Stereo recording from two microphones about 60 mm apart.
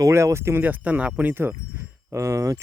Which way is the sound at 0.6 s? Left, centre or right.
Right.